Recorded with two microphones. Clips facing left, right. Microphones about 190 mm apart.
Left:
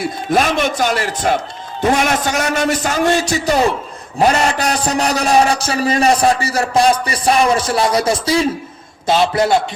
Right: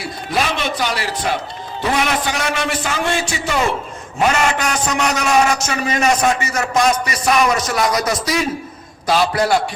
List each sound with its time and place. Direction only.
0.0 s a man's voice: 50° left (ahead or behind); by 9.6 s 25° left (ahead or behind)